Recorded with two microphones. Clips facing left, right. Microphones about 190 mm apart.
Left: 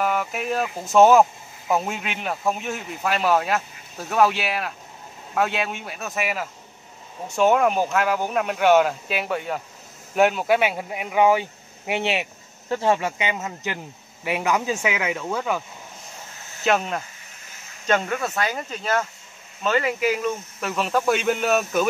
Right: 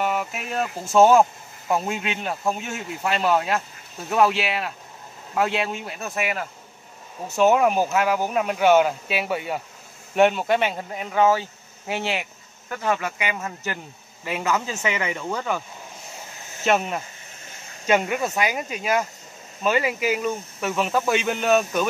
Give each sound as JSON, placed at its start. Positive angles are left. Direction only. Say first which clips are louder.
{"t": 0.0, "sound": "speech", "louder": "left 1 dB", "side_deg": 0}
{"t": 16.6, "sound": "speech", "louder": "even", "side_deg": -5}